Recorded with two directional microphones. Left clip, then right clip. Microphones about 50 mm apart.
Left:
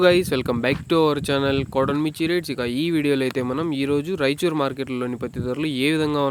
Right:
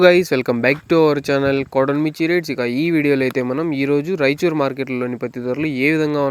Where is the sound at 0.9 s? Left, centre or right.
Right.